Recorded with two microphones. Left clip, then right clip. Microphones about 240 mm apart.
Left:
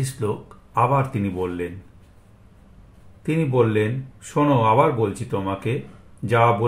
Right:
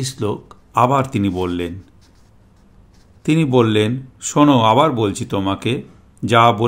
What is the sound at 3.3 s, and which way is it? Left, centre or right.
Speech, right.